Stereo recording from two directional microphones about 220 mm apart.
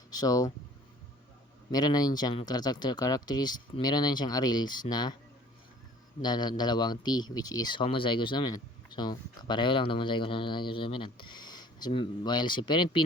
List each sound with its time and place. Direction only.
0.1 s speech: 15° left (ahead or behind)
1.7 s speech: 15° left (ahead or behind)
6.2 s speech: 20° left (ahead or behind)